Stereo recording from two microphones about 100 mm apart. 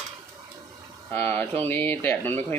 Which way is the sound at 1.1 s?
20° left (ahead or behind).